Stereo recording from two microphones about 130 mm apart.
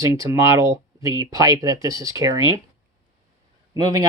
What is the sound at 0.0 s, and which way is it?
Speech, 25° right (ahead or behind).